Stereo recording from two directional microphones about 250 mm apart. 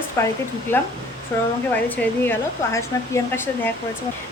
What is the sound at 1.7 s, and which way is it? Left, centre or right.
Speech, centre.